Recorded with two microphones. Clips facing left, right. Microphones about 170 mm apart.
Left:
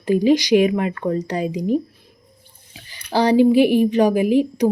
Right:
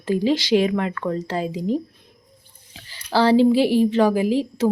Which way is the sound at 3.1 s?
15° left (ahead or behind).